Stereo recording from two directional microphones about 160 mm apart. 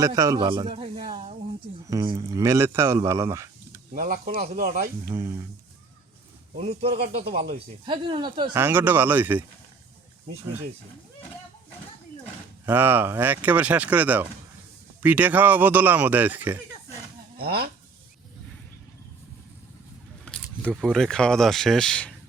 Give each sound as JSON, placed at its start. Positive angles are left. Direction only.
{"t": 0.0, "sound": "a man's voice", "side_deg": -25}
{"t": 1.9, "sound": "speech", "side_deg": -20}
{"t": 3.9, "sound": "speech", "side_deg": -60}
{"t": 5.1, "sound": "speech", "side_deg": -15}
{"t": 6.6, "sound": "speech", "side_deg": -40}
{"t": 7.9, "sound": "speech", "side_deg": -30}
{"t": 8.5, "sound": "speech", "side_deg": -15}
{"t": 12.6, "sound": "speech", "side_deg": -10}
{"t": 17.3, "sound": "speech", "side_deg": -75}
{"t": 20.2, "sound": "speech", "side_deg": 5}